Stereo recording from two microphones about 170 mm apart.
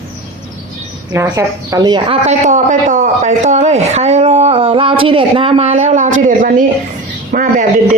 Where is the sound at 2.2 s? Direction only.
45° right (ahead or behind).